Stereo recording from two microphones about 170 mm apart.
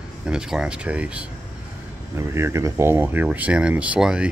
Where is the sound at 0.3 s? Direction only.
5° right (ahead or behind).